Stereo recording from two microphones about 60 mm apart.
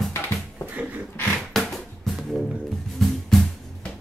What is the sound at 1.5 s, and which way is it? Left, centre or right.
Music, centre.